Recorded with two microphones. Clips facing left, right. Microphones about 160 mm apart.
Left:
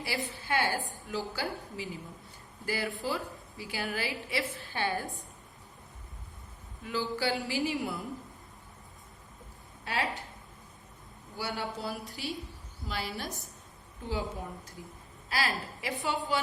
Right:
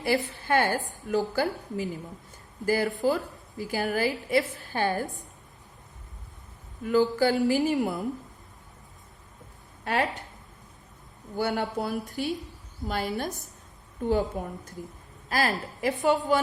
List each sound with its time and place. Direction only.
0.0 s a woman's voice: 50° right (ahead or behind)
6.8 s a woman's voice: 45° right (ahead or behind)
9.8 s speech: 55° right (ahead or behind)
11.3 s a woman's voice: 50° right (ahead or behind)